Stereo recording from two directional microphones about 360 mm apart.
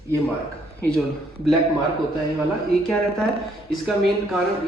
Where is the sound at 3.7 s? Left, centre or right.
Centre.